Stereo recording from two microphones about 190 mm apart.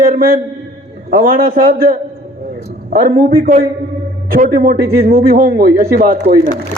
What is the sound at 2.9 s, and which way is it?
A man's voice, 50° right (ahead or behind).